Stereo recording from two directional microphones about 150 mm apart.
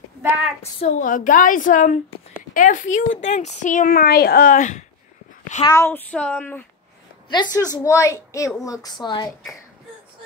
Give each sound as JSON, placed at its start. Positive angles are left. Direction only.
{"t": 0.7, "sound": "speech", "side_deg": 55}
{"t": 5.6, "sound": "speech", "side_deg": 20}
{"t": 7.2, "sound": "a woman's voice", "side_deg": 30}